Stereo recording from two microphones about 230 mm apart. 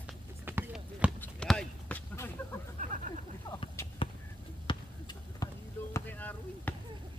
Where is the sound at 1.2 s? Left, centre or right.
Centre.